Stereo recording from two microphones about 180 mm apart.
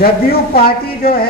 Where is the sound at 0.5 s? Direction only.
55° left (ahead or behind).